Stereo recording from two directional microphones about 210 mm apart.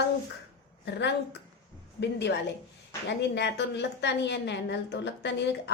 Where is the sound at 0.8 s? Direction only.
55° left (ahead or behind).